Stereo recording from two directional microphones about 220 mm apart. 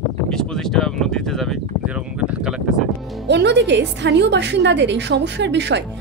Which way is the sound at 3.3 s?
50° right (ahead or behind).